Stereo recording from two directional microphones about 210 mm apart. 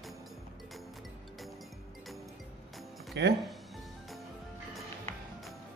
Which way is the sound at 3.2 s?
55° right (ahead or behind).